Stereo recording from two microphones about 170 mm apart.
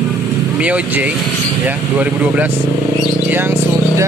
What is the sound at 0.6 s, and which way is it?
Speech, 10° right (ahead or behind).